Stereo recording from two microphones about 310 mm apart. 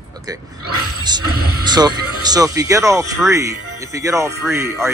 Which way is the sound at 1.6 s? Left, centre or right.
Centre.